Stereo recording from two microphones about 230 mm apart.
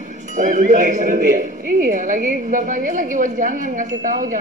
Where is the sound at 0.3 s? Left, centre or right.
Right.